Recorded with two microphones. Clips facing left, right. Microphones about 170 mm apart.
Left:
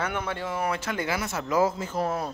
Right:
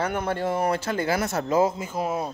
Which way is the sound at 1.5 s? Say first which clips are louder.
Right 1 dB; 20° right (ahead or behind).